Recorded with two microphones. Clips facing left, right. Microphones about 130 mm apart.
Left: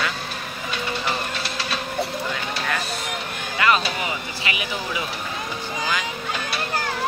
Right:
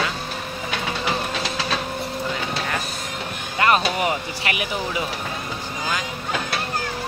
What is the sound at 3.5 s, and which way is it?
Speech, 45° right (ahead or behind).